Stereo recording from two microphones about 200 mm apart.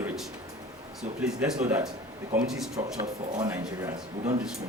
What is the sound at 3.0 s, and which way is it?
Speech, 20° right (ahead or behind).